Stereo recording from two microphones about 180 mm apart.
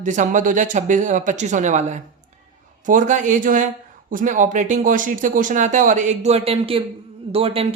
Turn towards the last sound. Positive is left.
turn(degrees=-30)  # may be behind; listen again after turning